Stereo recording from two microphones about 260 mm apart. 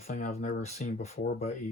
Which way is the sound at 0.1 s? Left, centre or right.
Left.